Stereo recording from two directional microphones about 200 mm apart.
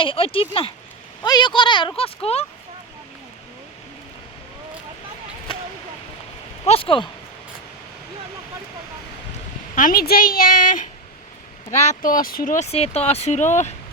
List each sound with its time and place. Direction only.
0.0 s speech: 25° left (ahead or behind)
5.5 s a sound: 25° left (ahead or behind)
6.7 s speech: 25° left (ahead or behind)
9.7 s a woman's voice: 45° left (ahead or behind)